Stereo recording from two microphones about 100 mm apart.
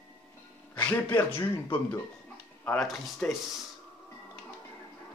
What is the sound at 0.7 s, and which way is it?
Speech, 15° left (ahead or behind).